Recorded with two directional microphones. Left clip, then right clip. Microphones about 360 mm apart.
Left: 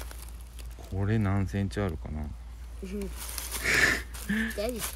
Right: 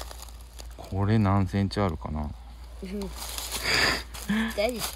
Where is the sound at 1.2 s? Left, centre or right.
Right.